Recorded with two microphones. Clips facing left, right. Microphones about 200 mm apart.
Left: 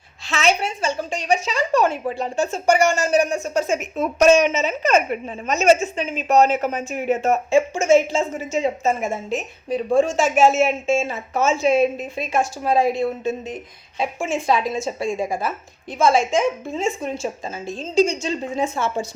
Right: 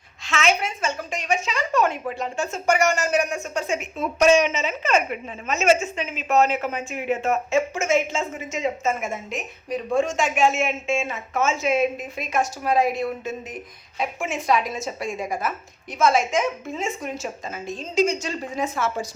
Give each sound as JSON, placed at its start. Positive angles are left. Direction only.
{"t": 0.3, "sound": "a woman's voice", "side_deg": 35}